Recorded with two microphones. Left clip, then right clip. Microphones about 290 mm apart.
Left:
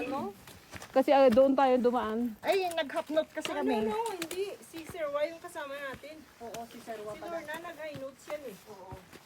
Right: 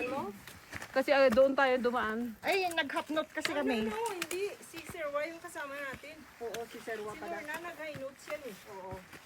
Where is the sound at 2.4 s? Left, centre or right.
Left.